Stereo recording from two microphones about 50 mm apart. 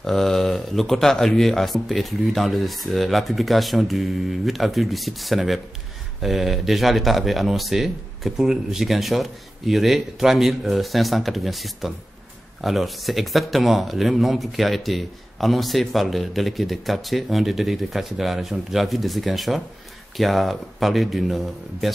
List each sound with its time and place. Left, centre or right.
0.0 s speech: centre